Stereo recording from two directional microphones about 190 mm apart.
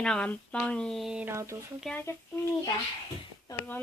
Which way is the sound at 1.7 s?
5° left (ahead or behind).